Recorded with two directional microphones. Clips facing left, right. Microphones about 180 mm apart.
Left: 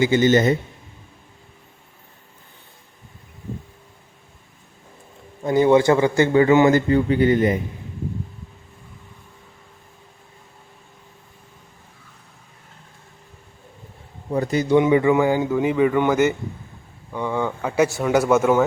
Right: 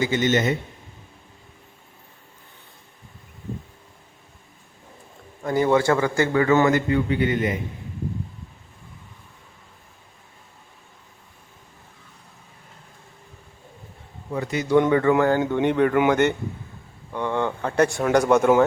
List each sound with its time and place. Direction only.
0.0 s speech: 30° left (ahead or behind)
5.4 s a man's voice: 20° left (ahead or behind)
6.7 s speech: 35° left (ahead or behind)
14.3 s a man's voice: 35° left (ahead or behind)
14.8 s speech: 10° left (ahead or behind)